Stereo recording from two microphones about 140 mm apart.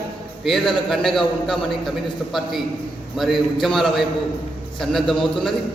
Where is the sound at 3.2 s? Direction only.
Centre (ahead or behind).